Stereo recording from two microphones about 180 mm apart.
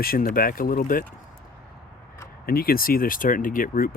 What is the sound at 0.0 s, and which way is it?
Speech, 55° left (ahead or behind).